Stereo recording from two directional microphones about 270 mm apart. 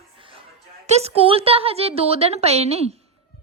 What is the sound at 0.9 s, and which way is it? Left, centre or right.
Speech, right.